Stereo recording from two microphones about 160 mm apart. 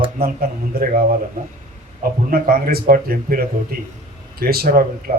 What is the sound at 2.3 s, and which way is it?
A man's voice, 70° right (ahead or behind).